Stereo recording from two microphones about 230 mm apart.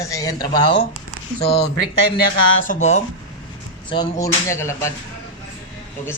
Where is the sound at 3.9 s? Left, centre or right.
Centre.